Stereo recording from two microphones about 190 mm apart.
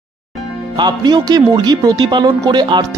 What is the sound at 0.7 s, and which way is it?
Speech, 20° right (ahead or behind).